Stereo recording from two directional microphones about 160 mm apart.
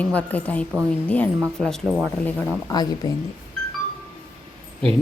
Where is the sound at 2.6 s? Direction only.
25° left (ahead or behind).